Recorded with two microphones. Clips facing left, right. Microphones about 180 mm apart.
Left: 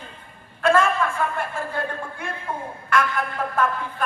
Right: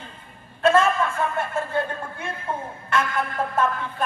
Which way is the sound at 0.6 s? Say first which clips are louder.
Right 1 dB; 25° right (ahead or behind).